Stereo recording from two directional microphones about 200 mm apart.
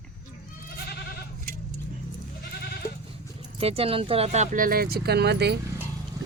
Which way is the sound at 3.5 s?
30° right (ahead or behind).